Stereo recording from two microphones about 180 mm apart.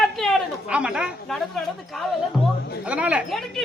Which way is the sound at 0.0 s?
Centre (ahead or behind).